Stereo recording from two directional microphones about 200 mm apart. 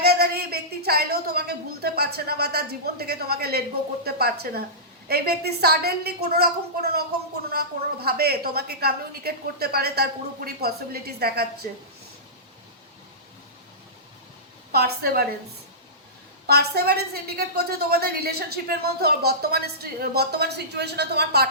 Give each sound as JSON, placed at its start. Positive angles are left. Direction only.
{"t": 0.0, "sound": "a woman's voice", "side_deg": -50}
{"t": 7.5, "sound": "a woman's voice", "side_deg": -50}
{"t": 14.7, "sound": "a woman's voice", "side_deg": -50}
{"t": 16.5, "sound": "a woman's voice", "side_deg": -50}